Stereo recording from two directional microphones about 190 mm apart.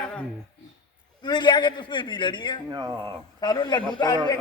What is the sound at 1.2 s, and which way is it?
A man's voice, 25° left (ahead or behind).